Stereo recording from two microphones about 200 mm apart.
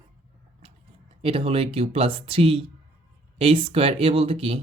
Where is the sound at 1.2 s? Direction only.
30° right (ahead or behind).